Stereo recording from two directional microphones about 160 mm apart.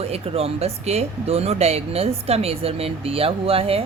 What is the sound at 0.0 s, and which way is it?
Speech, 40° right (ahead or behind).